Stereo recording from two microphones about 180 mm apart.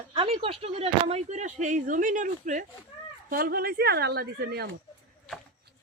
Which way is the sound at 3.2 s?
55° right (ahead or behind).